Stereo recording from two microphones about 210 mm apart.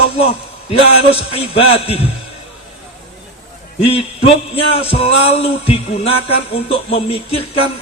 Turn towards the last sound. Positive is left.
turn(degrees=25)  # may be behind; listen again after turning